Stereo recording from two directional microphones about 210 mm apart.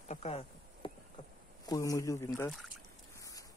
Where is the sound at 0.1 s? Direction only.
30° left (ahead or behind).